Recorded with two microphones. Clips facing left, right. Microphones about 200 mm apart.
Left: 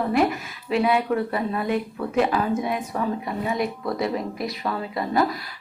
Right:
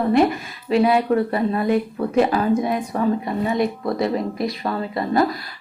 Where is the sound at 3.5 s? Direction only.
35° right (ahead or behind).